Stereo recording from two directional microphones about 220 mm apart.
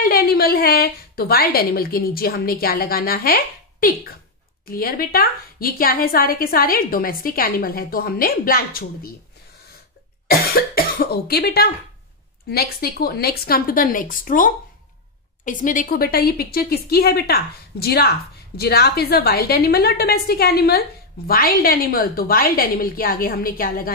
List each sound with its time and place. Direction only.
0.0 s a woman's voice: 40° left (ahead or behind)
10.2 s a woman's voice: 45° left (ahead or behind)